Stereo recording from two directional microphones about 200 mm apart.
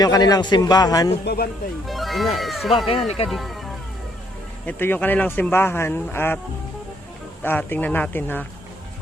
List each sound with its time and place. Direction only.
0.0 s a man's voice: 20° left (ahead or behind)
1.2 s speech: 55° left (ahead or behind)
1.9 s speech: centre (ahead or behind)
2.9 s a man's voice: 30° left (ahead or behind)
3.2 s speech: centre (ahead or behind)
7.4 s speech: 10° left (ahead or behind)